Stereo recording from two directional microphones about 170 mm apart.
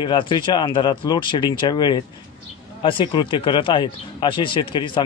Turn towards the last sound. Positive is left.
turn(degrees=30)  # may be behind; listen again after turning